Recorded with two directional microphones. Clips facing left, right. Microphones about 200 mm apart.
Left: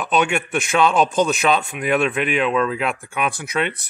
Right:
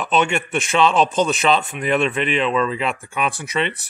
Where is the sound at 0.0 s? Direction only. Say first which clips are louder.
Even; centre (ahead or behind).